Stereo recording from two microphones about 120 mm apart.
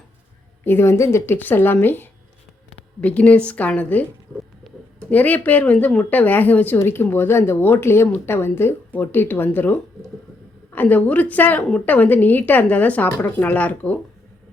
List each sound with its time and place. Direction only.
0.6 s a woman's voice: 20° left (ahead or behind)
5.1 s a woman's voice: 15° left (ahead or behind)
10.8 s a woman's voice: 15° left (ahead or behind)